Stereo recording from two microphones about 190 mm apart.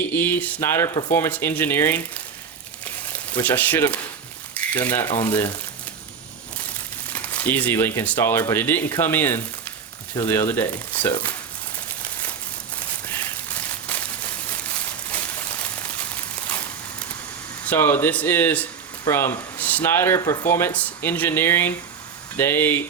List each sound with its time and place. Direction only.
0.1 s speech: 10° left (ahead or behind)
3.4 s speech: 10° left (ahead or behind)
5.0 s speech: 20° left (ahead or behind)
7.1 s speech: 10° left (ahead or behind)
17.7 s speech: 10° left (ahead or behind)